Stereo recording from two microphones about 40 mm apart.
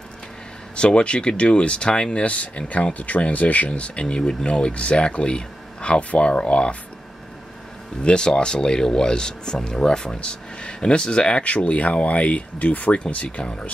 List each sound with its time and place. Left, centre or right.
0.7 s speech: left
8.0 s speech: left
13.0 s speech: left